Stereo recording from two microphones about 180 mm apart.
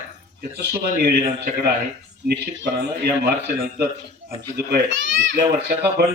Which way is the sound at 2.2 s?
65° right (ahead or behind).